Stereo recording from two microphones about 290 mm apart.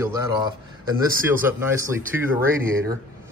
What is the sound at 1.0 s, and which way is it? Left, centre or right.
A man's voice, centre.